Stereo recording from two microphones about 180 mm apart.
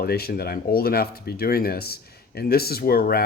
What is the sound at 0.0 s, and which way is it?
Speech, 60° left (ahead or behind).